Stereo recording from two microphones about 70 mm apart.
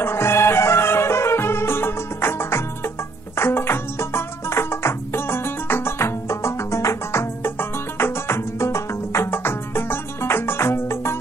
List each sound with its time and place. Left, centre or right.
0.0 s music: left